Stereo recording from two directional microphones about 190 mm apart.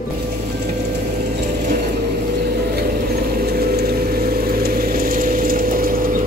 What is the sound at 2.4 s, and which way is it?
Mechanisms, 50° right (ahead or behind).